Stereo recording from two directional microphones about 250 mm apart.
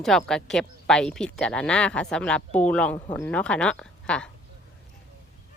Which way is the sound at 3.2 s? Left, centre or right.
Centre.